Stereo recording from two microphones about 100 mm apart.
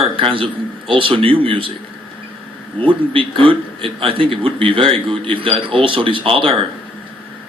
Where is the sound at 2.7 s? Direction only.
60° right (ahead or behind).